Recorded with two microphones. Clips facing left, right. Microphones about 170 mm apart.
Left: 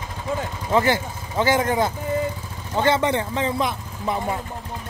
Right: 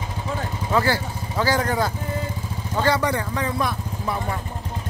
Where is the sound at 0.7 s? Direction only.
20° left (ahead or behind).